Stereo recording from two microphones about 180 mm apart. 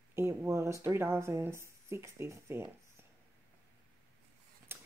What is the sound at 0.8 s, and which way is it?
Speech, 15° right (ahead or behind).